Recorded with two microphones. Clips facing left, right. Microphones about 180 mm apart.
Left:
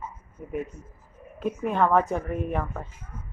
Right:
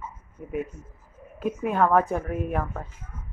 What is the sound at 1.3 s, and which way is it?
Speech, 5° right (ahead or behind).